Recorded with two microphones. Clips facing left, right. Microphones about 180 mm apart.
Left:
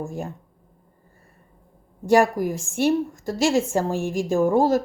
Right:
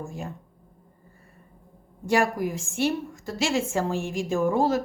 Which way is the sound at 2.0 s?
40° left (ahead or behind).